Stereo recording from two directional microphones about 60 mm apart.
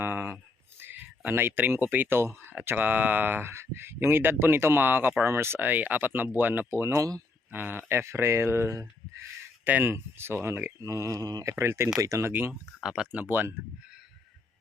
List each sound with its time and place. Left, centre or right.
0.0 s a sound: right
0.8 s speech: right
3.5 s speech: right
5.2 s speech: right
5.6 s speech: right
6.7 s speech: right
7.5 s speech: right
9.6 s speech: right
10.8 s speech: right
11.9 s speech: right
12.3 s speech: right
12.8 s speech: centre
13.1 s speech: right